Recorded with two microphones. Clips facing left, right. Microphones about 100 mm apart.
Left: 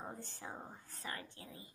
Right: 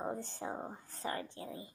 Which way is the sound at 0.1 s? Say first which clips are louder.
Right 8 dB; 30° right (ahead or behind).